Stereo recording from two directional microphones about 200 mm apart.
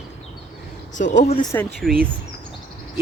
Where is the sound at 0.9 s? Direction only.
40° left (ahead or behind).